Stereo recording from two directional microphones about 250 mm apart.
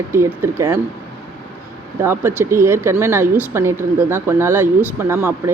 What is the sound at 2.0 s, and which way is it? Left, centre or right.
Speech, centre.